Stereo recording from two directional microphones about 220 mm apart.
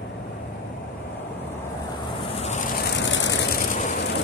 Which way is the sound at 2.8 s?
55° left (ahead or behind).